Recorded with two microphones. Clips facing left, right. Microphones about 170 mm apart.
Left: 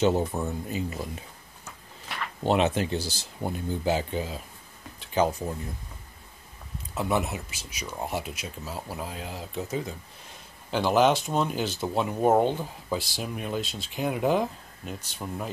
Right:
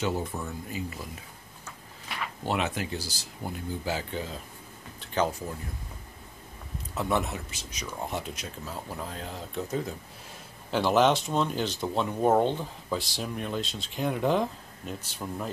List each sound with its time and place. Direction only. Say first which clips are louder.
0.0 s speech: left 6 dB; 25° left (ahead or behind)
2.4 s speech: left 7 dB; 25° left (ahead or behind)
7.0 s speech: left 1 dB; 5° left (ahead or behind)